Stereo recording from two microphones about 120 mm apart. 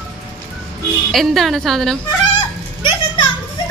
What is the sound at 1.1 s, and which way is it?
Speech, centre (ahead or behind).